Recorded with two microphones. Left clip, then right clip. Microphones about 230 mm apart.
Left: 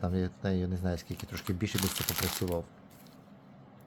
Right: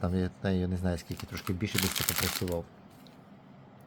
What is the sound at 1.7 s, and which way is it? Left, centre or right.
Speech, centre.